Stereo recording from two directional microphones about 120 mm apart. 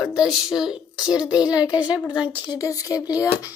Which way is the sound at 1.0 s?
35° left (ahead or behind).